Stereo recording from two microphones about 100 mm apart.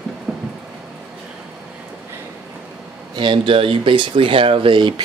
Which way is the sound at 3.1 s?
55° right (ahead or behind).